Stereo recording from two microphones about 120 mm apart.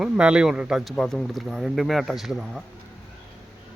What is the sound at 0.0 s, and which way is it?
Speech, 10° right (ahead or behind).